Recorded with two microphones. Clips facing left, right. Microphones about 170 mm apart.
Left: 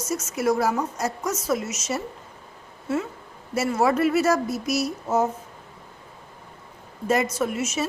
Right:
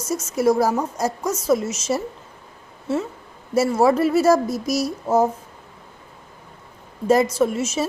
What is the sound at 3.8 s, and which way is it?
Speech, 35° right (ahead or behind).